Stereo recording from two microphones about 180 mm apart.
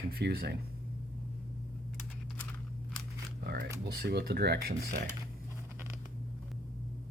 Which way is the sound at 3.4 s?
60° right (ahead or behind).